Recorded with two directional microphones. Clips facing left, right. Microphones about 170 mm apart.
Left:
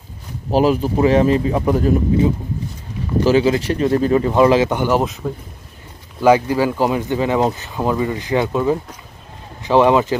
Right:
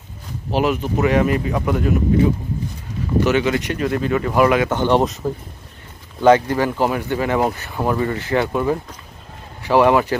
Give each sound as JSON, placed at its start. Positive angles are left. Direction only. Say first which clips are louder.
{"t": 0.5, "sound": "speech", "louder": "left 4 dB", "side_deg": 35}
{"t": 3.3, "sound": "speech", "louder": "left 6 dB", "side_deg": 30}
{"t": 4.6, "sound": "speech", "louder": "right 1 dB", "side_deg": 10}
{"t": 6.2, "sound": "speech", "louder": "even", "side_deg": 10}